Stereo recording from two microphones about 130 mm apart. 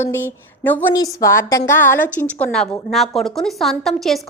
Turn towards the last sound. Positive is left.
turn(degrees=0)  # may be behind; listen again after turning